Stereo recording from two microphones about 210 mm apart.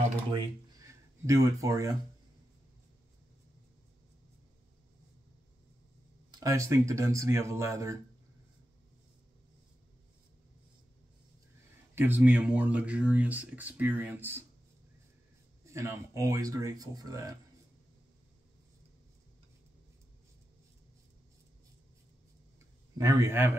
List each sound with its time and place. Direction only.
0.3 s speech: 15° right (ahead or behind)
6.4 s speech: 15° right (ahead or behind)
11.9 s speech: 10° right (ahead or behind)
15.6 s speech: 15° right (ahead or behind)
22.9 s speech: 15° right (ahead or behind)